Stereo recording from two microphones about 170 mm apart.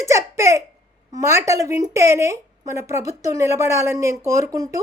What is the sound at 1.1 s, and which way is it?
A child's voice, 15° right (ahead or behind).